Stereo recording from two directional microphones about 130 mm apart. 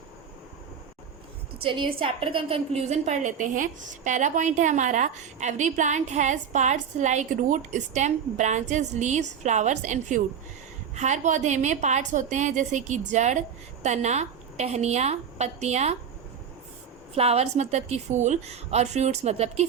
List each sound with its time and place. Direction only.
1.6 s a woman's voice: 40° right (ahead or behind)
17.2 s a woman's voice: 55° right (ahead or behind)